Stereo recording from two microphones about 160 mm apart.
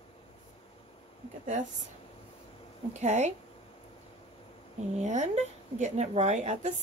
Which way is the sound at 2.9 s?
45° right (ahead or behind).